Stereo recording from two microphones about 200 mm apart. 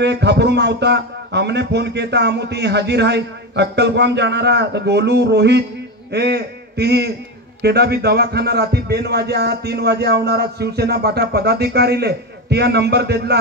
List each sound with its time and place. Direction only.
0.0 s a man's voice: 60° right (ahead or behind)